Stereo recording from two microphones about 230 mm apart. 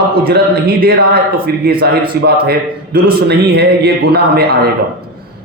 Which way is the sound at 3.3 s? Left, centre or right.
Right.